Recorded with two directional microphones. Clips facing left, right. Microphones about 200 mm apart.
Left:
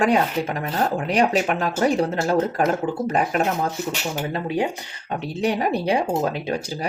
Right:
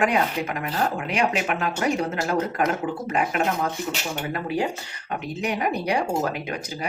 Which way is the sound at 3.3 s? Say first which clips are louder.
Left 2 dB; 40° left (ahead or behind).